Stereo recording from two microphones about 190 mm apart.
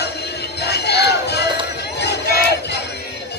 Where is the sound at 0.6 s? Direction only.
60° left (ahead or behind).